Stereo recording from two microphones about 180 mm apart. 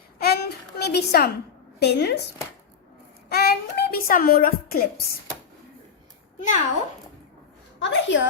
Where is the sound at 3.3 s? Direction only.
60° left (ahead or behind).